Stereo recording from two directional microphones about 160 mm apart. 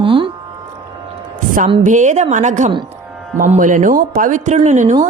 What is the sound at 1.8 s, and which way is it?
A woman's voice, 50° right (ahead or behind).